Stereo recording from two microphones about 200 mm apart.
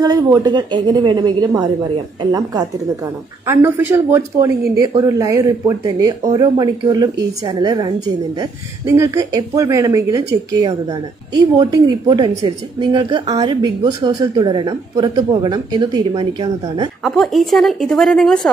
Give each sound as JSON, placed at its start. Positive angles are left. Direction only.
{"t": 0.0, "sound": "speech", "side_deg": -20}
{"t": 17.0, "sound": "a woman's voice", "side_deg": 0}